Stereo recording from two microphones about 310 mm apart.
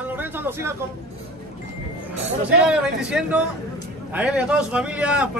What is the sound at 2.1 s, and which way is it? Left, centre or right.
Music, centre.